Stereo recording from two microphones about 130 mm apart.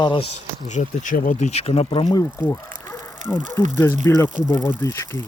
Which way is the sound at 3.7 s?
15° left (ahead or behind).